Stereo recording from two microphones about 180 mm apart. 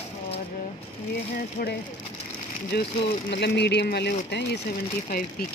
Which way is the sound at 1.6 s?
55° left (ahead or behind).